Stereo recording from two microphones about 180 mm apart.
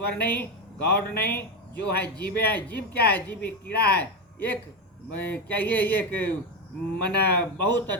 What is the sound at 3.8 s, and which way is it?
Speech, 60° left (ahead or behind).